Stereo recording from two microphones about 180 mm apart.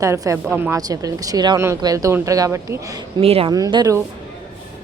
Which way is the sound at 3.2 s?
35° right (ahead or behind).